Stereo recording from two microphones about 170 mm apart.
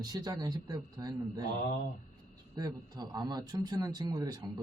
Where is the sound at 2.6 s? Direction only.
20° right (ahead or behind).